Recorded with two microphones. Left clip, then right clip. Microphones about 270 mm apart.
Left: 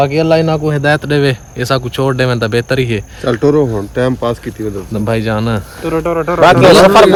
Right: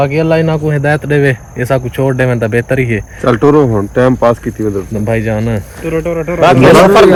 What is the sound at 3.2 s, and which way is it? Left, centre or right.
Speech, right.